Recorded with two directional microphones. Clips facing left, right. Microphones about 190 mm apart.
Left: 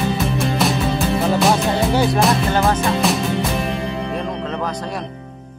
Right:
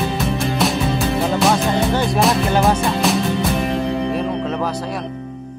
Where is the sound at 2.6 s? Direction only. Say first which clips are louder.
Right 1 dB; centre (ahead or behind).